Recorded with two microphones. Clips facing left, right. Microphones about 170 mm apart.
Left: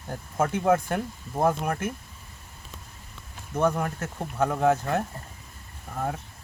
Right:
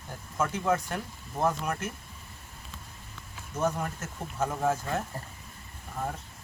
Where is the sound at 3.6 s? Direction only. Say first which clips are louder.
Left 5 dB; 60° left (ahead or behind).